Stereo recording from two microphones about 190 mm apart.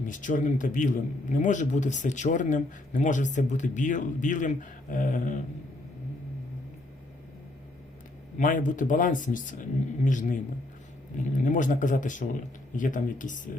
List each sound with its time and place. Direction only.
0.0 s a man's voice: 45° left (ahead or behind)
8.4 s speech: 45° left (ahead or behind)